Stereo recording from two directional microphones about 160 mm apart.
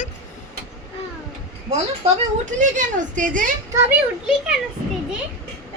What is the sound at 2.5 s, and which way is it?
Speech, 50° right (ahead or behind).